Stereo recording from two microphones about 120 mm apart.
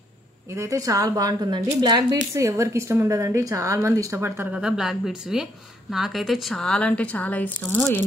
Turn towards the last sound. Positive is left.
turn(degrees=20)  # may be behind; listen again after turning